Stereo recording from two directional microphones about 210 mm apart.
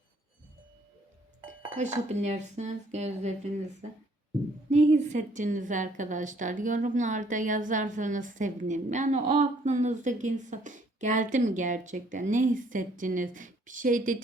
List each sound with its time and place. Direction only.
1.7 s a woman's voice: 35° right (ahead or behind)
4.7 s a woman's voice: 35° right (ahead or behind)